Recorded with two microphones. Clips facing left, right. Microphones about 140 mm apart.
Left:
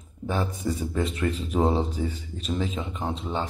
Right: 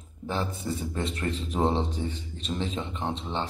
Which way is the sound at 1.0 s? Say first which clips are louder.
Left 4 dB; 35° right (ahead or behind).